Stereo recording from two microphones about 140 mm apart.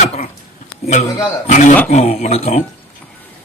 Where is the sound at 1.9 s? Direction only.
55° left (ahead or behind).